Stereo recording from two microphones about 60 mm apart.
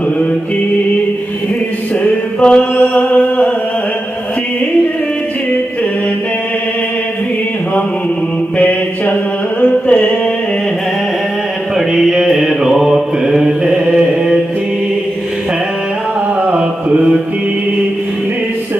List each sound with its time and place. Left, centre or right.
2.4 s mantra: centre
2.8 s a sound: left
8.5 s mantra: left
9.6 s music: left
11.7 s mantra: centre
16.4 s mantra: right